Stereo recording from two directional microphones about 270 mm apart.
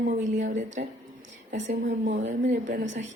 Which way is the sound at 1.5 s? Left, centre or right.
Right.